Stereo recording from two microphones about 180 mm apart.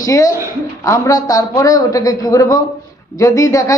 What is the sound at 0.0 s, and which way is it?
A woman's voice, 20° left (ahead or behind).